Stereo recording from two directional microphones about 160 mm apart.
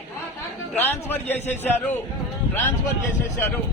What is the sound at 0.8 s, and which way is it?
A man's voice, 10° left (ahead or behind).